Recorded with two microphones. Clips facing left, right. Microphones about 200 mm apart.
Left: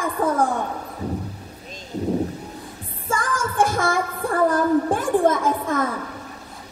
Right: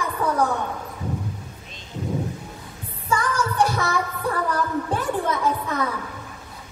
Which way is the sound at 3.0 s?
50° left (ahead or behind).